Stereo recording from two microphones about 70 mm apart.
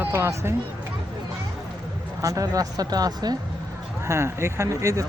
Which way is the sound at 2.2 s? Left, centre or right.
Right.